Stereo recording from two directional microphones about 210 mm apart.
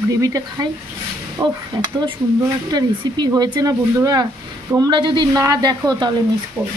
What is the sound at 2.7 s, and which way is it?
Speech, 20° right (ahead or behind).